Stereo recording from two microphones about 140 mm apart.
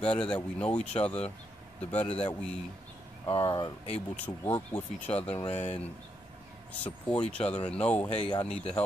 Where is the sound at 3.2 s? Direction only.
35° left (ahead or behind).